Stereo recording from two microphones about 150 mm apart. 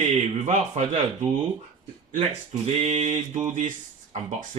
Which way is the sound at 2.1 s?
45° right (ahead or behind).